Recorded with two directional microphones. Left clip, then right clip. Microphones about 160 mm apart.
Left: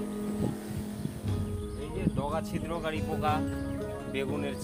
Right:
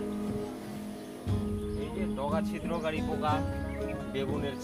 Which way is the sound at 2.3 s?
30° left (ahead or behind).